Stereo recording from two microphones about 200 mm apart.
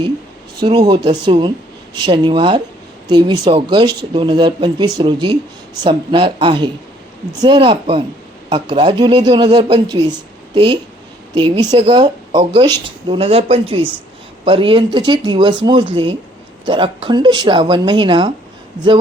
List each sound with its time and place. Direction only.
0.6 s speech: 20° right (ahead or behind)